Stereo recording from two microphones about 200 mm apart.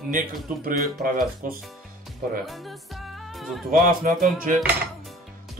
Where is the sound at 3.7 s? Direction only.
45° right (ahead or behind).